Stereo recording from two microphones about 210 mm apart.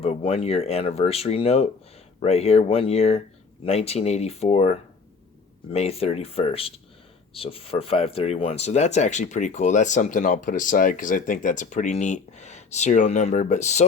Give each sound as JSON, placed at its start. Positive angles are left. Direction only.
{"t": 0.0, "sound": "speech", "side_deg": 30}